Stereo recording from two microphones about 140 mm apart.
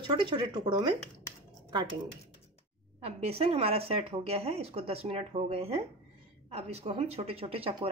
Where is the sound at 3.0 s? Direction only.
45° right (ahead or behind).